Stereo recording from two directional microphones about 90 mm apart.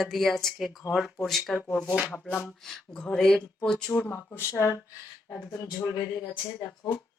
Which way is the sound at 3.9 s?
20° left (ahead or behind).